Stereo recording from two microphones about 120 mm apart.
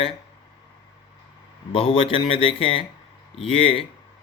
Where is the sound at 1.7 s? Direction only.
50° left (ahead or behind).